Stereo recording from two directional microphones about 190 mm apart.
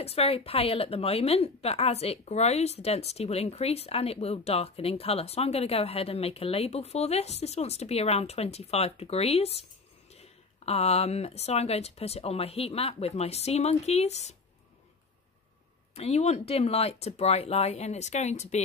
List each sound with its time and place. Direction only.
0.0 s a woman's voice: 30° left (ahead or behind)
15.9 s a woman's voice: 35° left (ahead or behind)